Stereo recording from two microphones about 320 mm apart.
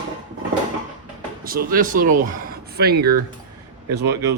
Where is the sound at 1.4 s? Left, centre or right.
Right.